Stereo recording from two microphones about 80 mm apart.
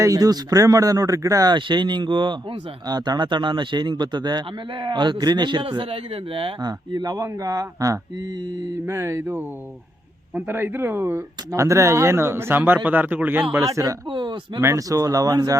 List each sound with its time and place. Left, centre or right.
0.0 s speech: right
1.5 s speech: right
2.8 s speech: right
6.6 s speech: right
8.9 s speech: right
13.6 s speech: right
14.1 s speech: right
14.6 s speech: right